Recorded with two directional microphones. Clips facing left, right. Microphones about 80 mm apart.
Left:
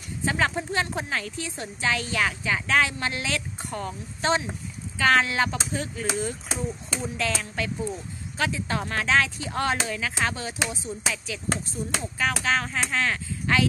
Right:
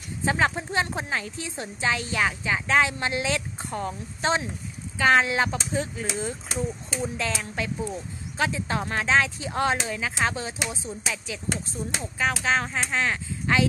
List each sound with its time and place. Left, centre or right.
0.2 s a woman's voice: right
10.9 s a woman's voice: centre